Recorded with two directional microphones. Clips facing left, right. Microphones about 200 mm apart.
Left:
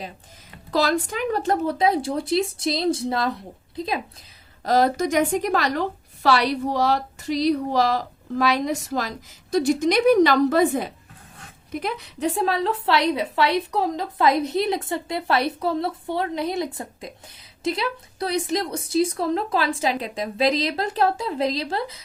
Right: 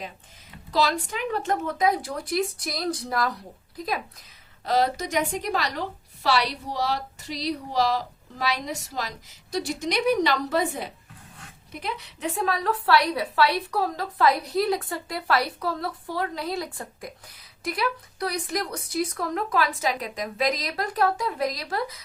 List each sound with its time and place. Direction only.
0.7 s a woman's voice: 50° left (ahead or behind)
1.4 s a woman's voice: 35° left (ahead or behind)
4.6 s a woman's voice: 45° left (ahead or behind)
11.8 s a woman's voice: 35° left (ahead or behind)